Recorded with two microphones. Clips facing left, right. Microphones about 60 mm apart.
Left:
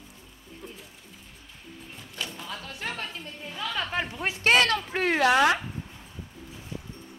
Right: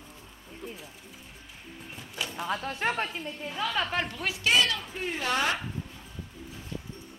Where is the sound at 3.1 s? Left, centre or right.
Centre.